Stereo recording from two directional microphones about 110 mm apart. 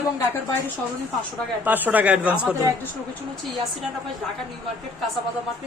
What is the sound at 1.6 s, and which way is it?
Speech, 15° right (ahead or behind).